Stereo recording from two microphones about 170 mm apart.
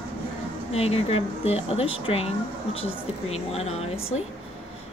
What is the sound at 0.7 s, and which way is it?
Speech, 35° left (ahead or behind).